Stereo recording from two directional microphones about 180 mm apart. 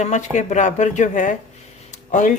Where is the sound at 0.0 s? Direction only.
40° left (ahead or behind).